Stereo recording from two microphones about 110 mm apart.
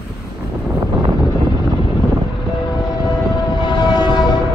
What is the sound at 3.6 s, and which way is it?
Train, 40° left (ahead or behind).